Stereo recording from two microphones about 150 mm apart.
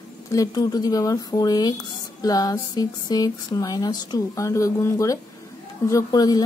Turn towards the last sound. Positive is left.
turn(degrees=25)  # may be behind; listen again after turning